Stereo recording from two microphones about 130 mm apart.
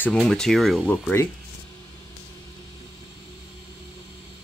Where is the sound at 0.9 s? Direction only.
15° left (ahead or behind).